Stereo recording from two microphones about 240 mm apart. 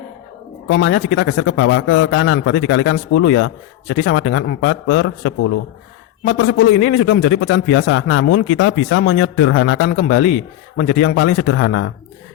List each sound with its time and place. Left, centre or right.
0.7 s a man's voice: left